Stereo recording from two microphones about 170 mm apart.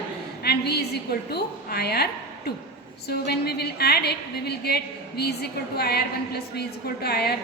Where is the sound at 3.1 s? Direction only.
70° left (ahead or behind).